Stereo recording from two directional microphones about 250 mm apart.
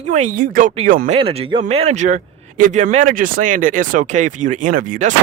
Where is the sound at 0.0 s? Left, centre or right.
Right.